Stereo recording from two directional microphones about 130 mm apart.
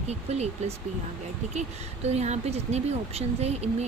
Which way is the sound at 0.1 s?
55° right (ahead or behind).